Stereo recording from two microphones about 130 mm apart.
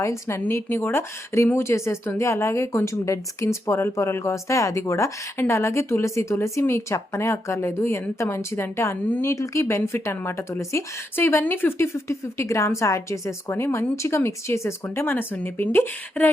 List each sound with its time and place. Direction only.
0.0 s a woman's voice: 20° left (ahead or behind)